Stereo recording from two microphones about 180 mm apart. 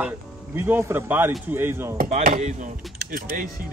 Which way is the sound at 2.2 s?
45° right (ahead or behind).